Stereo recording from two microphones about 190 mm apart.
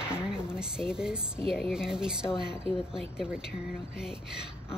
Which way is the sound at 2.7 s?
30° right (ahead or behind).